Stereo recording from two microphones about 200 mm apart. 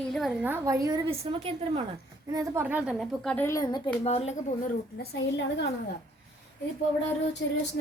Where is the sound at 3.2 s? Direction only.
10° left (ahead or behind).